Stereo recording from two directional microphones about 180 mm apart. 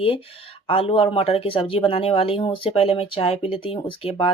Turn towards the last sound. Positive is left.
turn(degrees=30)  # may be behind; listen again after turning